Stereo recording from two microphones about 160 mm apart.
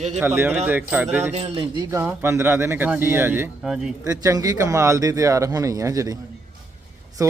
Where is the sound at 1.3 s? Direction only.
40° right (ahead or behind).